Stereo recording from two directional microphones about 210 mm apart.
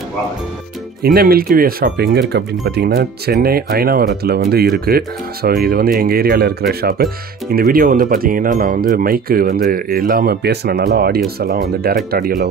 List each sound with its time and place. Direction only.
1.0 s speech: 45° right (ahead or behind)